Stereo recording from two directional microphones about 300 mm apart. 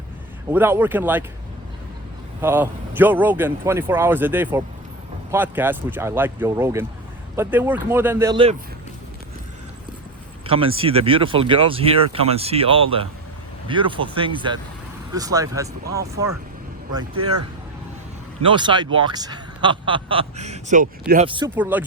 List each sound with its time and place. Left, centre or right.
0.5 s speech: centre
2.4 s speech: centre
10.4 s speech: centre
17.0 s speech: right
18.4 s speech: centre